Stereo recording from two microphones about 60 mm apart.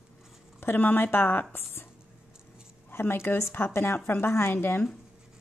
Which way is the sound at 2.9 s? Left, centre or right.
Left.